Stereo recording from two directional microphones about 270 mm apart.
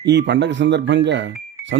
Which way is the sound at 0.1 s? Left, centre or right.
Right.